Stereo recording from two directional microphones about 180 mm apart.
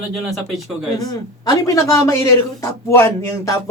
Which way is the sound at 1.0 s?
20° left (ahead or behind).